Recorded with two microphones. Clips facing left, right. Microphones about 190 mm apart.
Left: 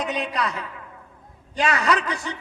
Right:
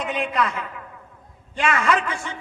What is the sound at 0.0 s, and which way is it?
A man's voice, 40° left (ahead or behind).